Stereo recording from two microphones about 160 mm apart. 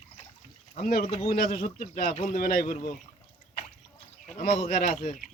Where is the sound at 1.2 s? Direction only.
70° left (ahead or behind).